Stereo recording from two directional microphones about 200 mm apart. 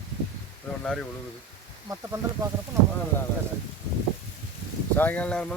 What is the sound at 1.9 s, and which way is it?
Speech, 15° right (ahead or behind).